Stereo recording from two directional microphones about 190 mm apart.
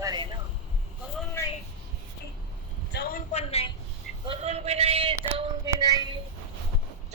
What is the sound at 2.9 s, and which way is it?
Speech, 55° left (ahead or behind).